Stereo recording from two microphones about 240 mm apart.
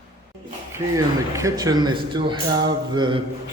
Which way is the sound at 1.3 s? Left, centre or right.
Centre.